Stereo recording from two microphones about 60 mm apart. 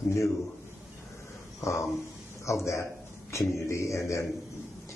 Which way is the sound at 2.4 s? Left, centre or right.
Left.